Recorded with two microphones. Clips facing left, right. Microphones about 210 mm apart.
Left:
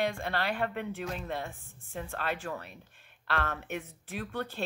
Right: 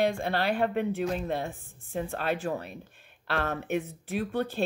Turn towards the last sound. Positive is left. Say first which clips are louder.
# right 7 dB
turn(degrees=-35)  # may be behind; listen again after turning